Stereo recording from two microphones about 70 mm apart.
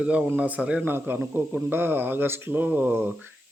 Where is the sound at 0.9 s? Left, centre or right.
Right.